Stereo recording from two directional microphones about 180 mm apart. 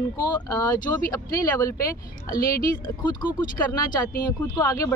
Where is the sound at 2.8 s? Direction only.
25° left (ahead or behind).